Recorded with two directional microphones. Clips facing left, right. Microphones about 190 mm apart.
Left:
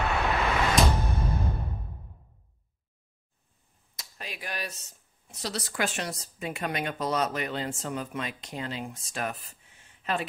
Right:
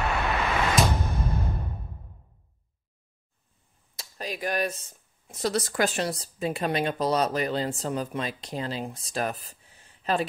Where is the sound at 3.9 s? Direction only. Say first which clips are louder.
Right 7 dB; 40° right (ahead or behind).